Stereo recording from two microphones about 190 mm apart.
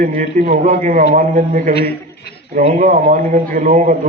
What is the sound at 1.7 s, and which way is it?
Speech, 55° left (ahead or behind).